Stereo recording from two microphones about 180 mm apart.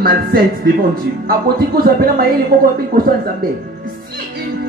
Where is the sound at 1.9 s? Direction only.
55° right (ahead or behind).